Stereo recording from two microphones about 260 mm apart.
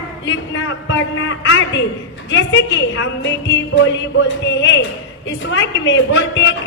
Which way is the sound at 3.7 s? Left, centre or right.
Left.